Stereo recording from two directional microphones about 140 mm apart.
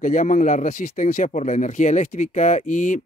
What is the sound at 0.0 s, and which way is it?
Speech, 70° left (ahead or behind).